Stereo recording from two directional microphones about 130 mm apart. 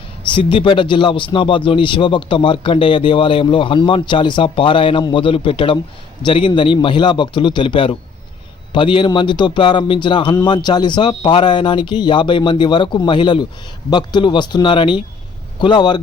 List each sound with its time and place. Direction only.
0.3 s a man's voice: 40° left (ahead or behind)